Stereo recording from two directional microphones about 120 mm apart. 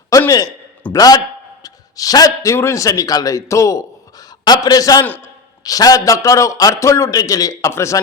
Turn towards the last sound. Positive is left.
turn(degrees=25)  # may be behind; listen again after turning